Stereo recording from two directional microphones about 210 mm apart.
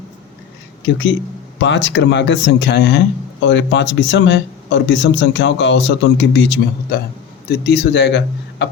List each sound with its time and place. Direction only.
1.5 s speech: 60° left (ahead or behind)